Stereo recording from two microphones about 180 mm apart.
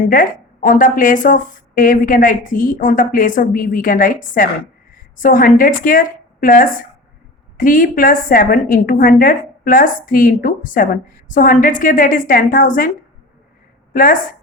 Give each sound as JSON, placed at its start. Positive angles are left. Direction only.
{"t": 0.0, "sound": "a woman's voice", "side_deg": 50}
{"t": 13.9, "sound": "a woman's voice", "side_deg": 50}